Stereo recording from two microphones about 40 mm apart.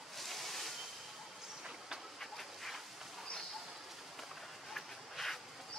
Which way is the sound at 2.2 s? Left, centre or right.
Centre.